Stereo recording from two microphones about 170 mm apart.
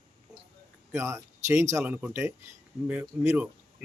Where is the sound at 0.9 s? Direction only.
15° right (ahead or behind).